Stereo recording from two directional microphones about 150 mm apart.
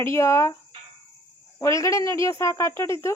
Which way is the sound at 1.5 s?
20° left (ahead or behind).